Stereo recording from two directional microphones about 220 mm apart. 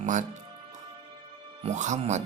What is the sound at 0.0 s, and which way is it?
Speech, 35° right (ahead or behind).